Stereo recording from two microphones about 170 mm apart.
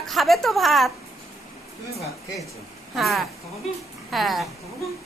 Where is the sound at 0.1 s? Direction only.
Centre (ahead or behind).